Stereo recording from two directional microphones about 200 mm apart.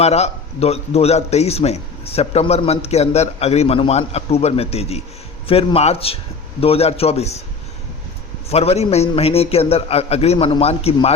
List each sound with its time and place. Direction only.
0.0 s a man's voice: 30° left (ahead or behind)
8.4 s a man's voice: 30° left (ahead or behind)